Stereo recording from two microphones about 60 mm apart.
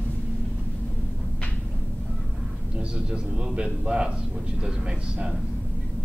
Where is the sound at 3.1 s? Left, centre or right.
Centre.